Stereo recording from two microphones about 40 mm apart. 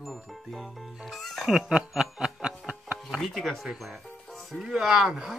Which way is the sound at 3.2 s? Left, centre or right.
Centre.